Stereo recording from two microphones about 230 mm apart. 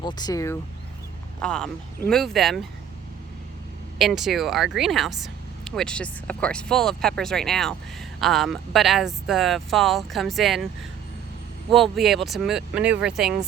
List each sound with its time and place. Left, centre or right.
0.0 s speech: centre
1.4 s speech: centre
3.9 s speech: centre
11.7 s speech: centre